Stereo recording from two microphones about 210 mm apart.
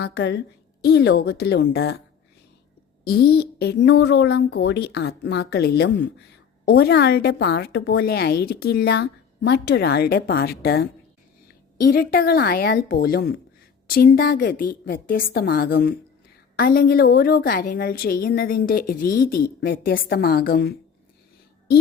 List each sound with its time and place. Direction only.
0.0 s a woman's voice: 55° left (ahead or behind)
3.1 s a woman's voice: 50° left (ahead or behind)